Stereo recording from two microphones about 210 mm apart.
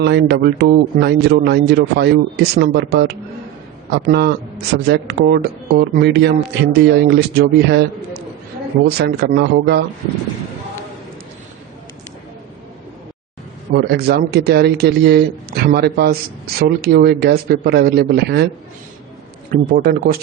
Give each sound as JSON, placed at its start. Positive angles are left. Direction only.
{"t": 0.0, "sound": "speech", "side_deg": -55}
{"t": 9.0, "sound": "speech", "side_deg": -55}
{"t": 13.7, "sound": "speech", "side_deg": -50}
{"t": 19.5, "sound": "speech", "side_deg": -40}